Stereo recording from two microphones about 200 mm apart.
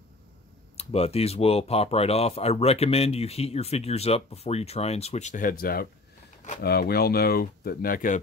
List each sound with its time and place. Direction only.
0.7 s speech: 30° left (ahead or behind)